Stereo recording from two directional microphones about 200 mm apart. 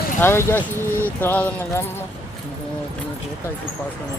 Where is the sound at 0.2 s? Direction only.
10° left (ahead or behind).